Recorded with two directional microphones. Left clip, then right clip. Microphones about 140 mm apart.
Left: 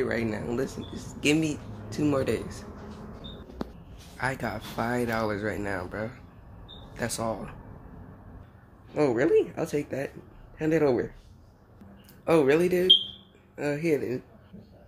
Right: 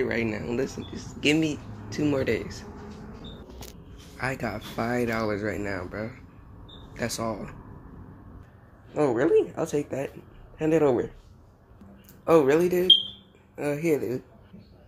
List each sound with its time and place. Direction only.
0.0 s speech: 15° left (ahead or behind)
4.2 s speech: 5° left (ahead or behind)
8.9 s speech: 10° left (ahead or behind)
12.3 s speech: 10° left (ahead or behind)